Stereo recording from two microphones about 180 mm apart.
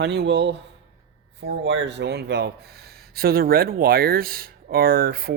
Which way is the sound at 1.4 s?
90° right.